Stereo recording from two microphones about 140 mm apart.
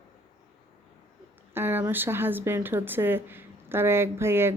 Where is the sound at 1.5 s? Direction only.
15° right (ahead or behind).